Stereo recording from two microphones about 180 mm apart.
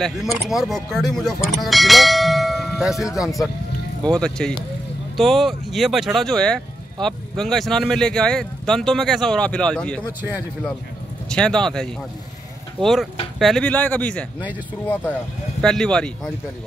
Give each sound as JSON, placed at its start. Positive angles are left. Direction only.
{"t": 0.0, "sound": "speech", "side_deg": 0}
{"t": 11.2, "sound": "speech", "side_deg": 5}
{"t": 15.6, "sound": "speech", "side_deg": 5}